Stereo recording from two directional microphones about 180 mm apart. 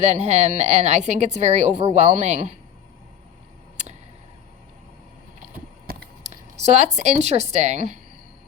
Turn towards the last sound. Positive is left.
turn(degrees=-40)  # may be behind; listen again after turning